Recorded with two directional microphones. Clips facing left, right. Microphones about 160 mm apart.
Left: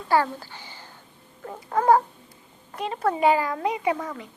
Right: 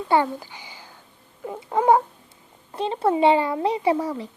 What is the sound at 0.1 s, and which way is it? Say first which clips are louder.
Speech: right 1 dB; 20° right (ahead or behind).